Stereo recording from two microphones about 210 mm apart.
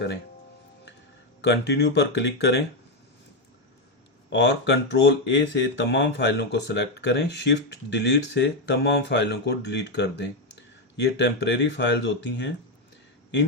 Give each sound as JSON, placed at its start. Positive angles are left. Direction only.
{"t": 1.4, "sound": "speech", "side_deg": 55}
{"t": 4.3, "sound": "speech", "side_deg": 55}